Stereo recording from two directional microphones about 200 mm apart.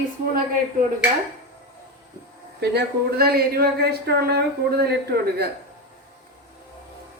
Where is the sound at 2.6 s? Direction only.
55° right (ahead or behind).